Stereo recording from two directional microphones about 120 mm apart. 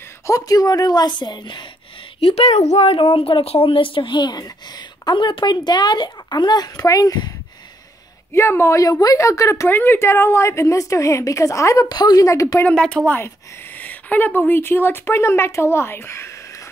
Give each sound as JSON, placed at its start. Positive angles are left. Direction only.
{"t": 0.3, "sound": "speech", "side_deg": 30}
{"t": 2.1, "sound": "speech", "side_deg": 55}
{"t": 8.3, "sound": "a woman's voice", "side_deg": 20}
{"t": 12.6, "sound": "a woman's voice", "side_deg": 5}